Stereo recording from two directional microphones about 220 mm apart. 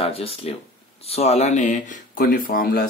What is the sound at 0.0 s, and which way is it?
Speech, 25° left (ahead or behind).